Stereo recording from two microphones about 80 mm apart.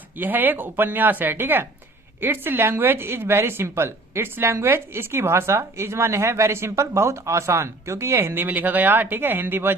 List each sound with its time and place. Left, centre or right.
0.2 s a woman's voice: right